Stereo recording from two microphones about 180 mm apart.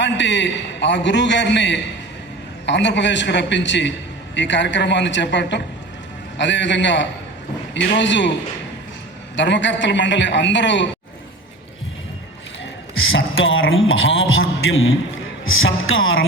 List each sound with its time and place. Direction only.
0.0 s a man's voice: 80° left
13.1 s speech: 90° left